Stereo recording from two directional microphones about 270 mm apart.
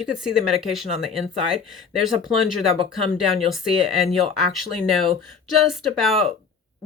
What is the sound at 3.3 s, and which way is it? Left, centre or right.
Speech, centre.